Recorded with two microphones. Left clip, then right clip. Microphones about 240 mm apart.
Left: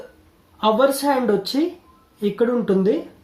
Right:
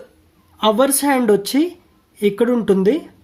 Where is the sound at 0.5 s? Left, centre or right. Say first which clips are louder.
Right 1 dB; right.